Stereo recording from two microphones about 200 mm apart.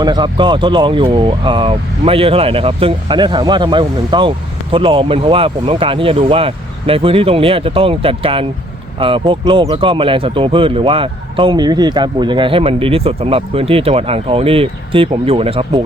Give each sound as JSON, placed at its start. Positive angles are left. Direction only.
{"t": 0.0, "sound": "speech", "side_deg": -20}